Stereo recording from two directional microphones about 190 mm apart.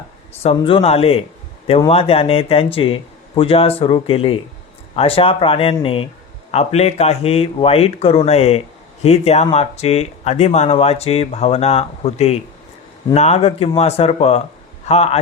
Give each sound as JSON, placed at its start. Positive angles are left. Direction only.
{"t": 0.4, "sound": "speech", "side_deg": 30}